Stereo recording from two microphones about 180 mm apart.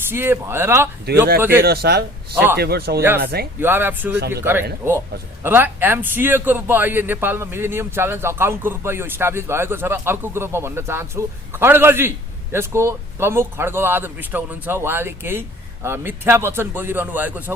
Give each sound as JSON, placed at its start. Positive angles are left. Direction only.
{"t": 0.1, "sound": "a man's voice", "side_deg": -15}
{"t": 1.0, "sound": "speech", "side_deg": -60}
{"t": 1.4, "sound": "a man's voice", "side_deg": -10}
{"t": 1.6, "sound": "speech", "side_deg": -60}
{"t": 3.6, "sound": "a man's voice", "side_deg": -10}